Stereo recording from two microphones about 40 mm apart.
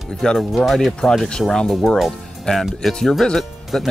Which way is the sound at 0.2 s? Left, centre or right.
Centre.